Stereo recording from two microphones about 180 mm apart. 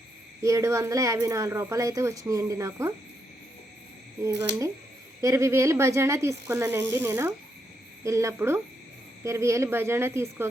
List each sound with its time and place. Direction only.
0.4 s speech: 15° right (ahead or behind)
4.2 s speech: 15° right (ahead or behind)